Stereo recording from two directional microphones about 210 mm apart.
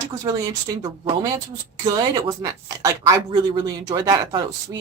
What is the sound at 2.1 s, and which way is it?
Speech, 20° right (ahead or behind).